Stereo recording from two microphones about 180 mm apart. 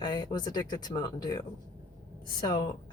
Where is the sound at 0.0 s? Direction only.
25° left (ahead or behind).